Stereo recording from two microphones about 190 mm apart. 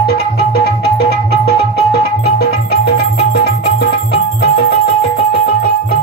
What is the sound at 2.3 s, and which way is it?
Music, 55° left (ahead or behind).